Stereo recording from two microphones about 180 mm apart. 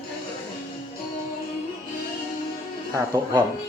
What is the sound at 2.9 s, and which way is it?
Speech, 20° right (ahead or behind).